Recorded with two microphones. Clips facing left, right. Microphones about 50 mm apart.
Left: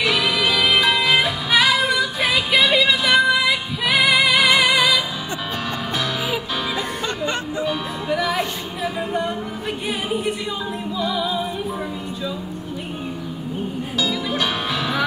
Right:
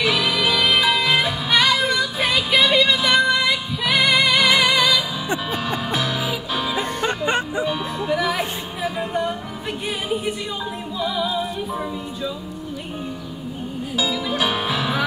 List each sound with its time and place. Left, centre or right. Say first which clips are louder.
0.0 s music: even; centre
7.0 s music: right 3 dB; right
7.6 s music: even; centre
13.9 s music: right 1 dB; centre